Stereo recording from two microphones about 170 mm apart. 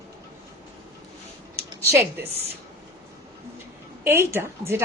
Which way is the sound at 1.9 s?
15° right (ahead or behind).